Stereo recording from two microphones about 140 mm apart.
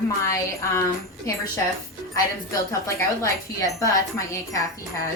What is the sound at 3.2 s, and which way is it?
Speech, 25° left (ahead or behind).